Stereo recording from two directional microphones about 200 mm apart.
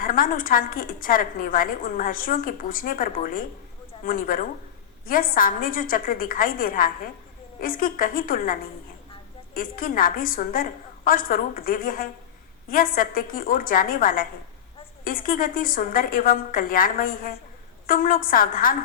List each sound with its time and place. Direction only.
0.0 s a woman's voice: 45° left (ahead or behind)
9.6 s a woman's voice: 45° left (ahead or behind)